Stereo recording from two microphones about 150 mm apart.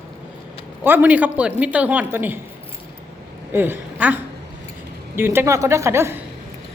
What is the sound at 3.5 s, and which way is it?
Speech, 15° right (ahead or behind).